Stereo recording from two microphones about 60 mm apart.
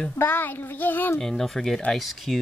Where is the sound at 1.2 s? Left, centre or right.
Centre.